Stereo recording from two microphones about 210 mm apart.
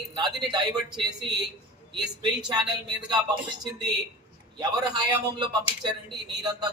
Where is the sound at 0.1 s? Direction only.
20° right (ahead or behind).